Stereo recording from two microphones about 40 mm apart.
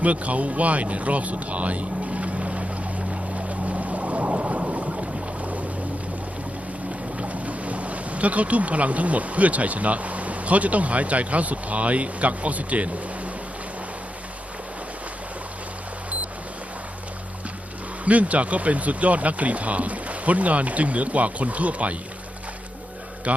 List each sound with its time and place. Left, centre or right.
0.0 s speech: right
3.1 s boat: right
7.2 s speech: right
18.0 s speech: right